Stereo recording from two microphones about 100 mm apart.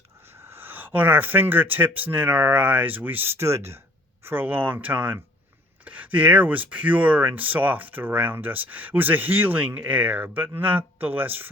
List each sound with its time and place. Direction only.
0.3 s speech: 25° right (ahead or behind)